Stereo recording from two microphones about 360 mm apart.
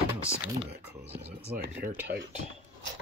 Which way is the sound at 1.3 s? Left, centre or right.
Right.